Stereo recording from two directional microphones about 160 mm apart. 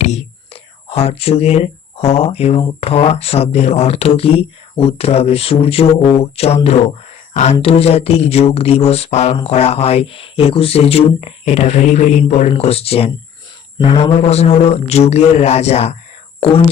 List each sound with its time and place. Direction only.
0.0 s speech: 40° left (ahead or behind)
4.9 s mantra: 40° left (ahead or behind)
7.6 s mantra: 40° left (ahead or behind)